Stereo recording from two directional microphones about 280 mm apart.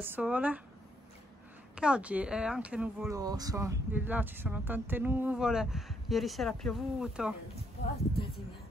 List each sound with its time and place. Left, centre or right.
0.0 s speech: centre
1.8 s speech: centre
7.8 s speech: left